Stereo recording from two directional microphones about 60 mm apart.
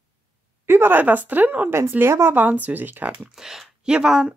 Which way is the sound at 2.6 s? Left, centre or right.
Right.